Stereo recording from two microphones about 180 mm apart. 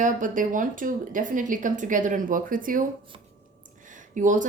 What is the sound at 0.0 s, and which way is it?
A woman's voice, 45° right (ahead or behind).